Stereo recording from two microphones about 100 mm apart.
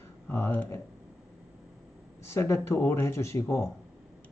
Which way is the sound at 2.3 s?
25° left (ahead or behind).